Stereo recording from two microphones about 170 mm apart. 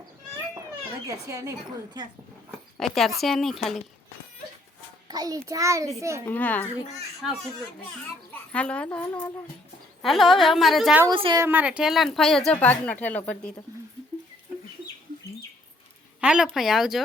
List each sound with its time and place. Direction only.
1.0 s a woman's voice: 20° right (ahead or behind)
2.7 s speech: centre (ahead or behind)
5.0 s a woman's voice: 20° right (ahead or behind)
6.2 s a woman's voice: 10° left (ahead or behind)
8.3 s speech: 5° left (ahead or behind)
10.0 s speech: centre (ahead or behind)
11.1 s a woman's voice: 30° right (ahead or behind)
11.4 s speech: 10° right (ahead or behind); by 13.5 s 10° left (ahead or behind)
16.2 s speech: 5° right (ahead or behind)